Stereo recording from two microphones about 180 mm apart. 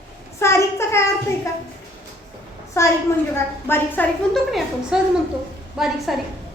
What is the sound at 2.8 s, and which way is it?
A woman's voice, 15° left (ahead or behind).